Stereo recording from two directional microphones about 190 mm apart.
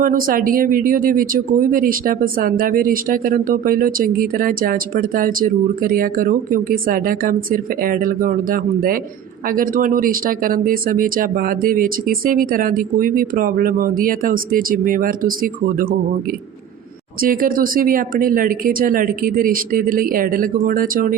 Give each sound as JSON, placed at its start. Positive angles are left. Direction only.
{"t": 0.0, "sound": "speech", "side_deg": -45}
{"t": 17.2, "sound": "speech", "side_deg": -50}